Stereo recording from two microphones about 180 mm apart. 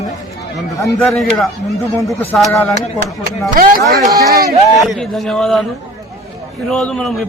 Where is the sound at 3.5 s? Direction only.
50° right (ahead or behind).